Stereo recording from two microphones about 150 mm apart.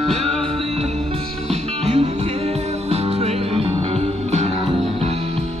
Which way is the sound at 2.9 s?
45° right (ahead or behind).